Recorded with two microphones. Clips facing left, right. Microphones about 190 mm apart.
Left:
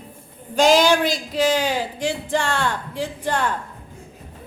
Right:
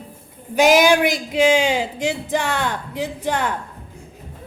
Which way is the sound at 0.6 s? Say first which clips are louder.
Right 2 dB; 15° right (ahead or behind).